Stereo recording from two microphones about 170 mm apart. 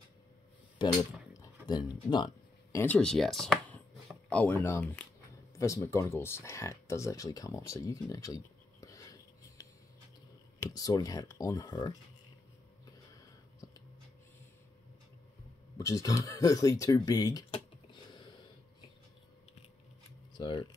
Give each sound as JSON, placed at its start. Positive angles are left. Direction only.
{"t": 0.7, "sound": "a sound", "side_deg": 20}
{"t": 2.8, "sound": "speech", "side_deg": 5}
{"t": 8.8, "sound": "a sound", "side_deg": 20}
{"t": 10.6, "sound": "speech", "side_deg": 20}
{"t": 15.8, "sound": "speech", "side_deg": 20}
{"t": 20.3, "sound": "speech", "side_deg": 25}